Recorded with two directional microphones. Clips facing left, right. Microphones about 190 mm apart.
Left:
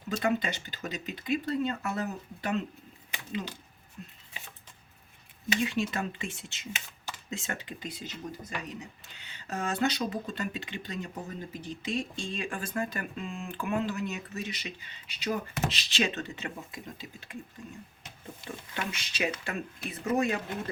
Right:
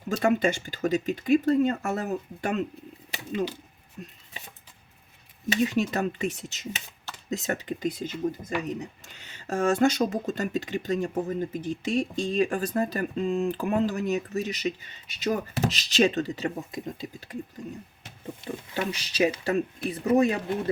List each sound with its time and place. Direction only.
0.2 s speech: 45° right (ahead or behind)
5.6 s speech: 40° right (ahead or behind)
18.4 s speech: 35° right (ahead or behind)